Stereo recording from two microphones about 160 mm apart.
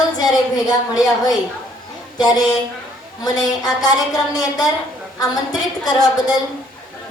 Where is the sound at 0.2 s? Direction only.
25° left (ahead or behind).